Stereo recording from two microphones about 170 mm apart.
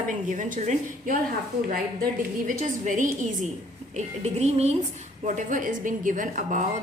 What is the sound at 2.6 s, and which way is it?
A woman's voice, 50° right (ahead or behind).